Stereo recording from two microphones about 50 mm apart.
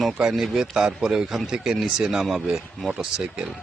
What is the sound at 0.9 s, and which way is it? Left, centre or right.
Speech, centre.